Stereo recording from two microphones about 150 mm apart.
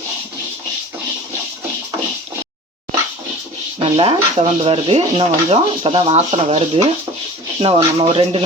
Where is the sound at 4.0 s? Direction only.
40° right (ahead or behind).